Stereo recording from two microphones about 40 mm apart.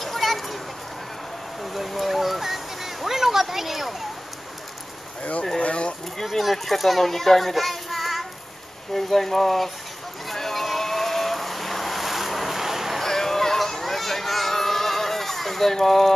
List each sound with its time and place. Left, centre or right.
0.0 s children playing: centre
1.6 s a sound: centre
5.6 s speech: left
6.2 s a child's voice: centre
10.2 s vehicle: centre
13.0 s a sound: centre